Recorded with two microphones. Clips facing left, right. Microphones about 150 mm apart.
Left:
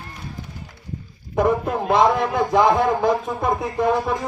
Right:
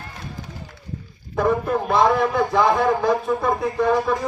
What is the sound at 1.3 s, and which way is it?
A man's voice, 20° left (ahead or behind).